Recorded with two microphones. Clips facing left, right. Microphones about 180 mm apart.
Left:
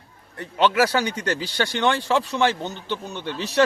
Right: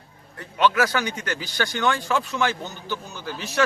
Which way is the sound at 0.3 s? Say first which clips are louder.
Left 2 dB; 25° left (ahead or behind).